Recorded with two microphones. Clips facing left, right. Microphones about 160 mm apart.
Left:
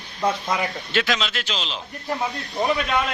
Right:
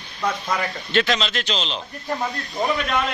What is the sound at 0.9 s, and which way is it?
Speech, 5° left (ahead or behind).